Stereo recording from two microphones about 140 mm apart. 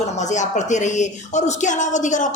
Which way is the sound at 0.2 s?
60° left (ahead or behind).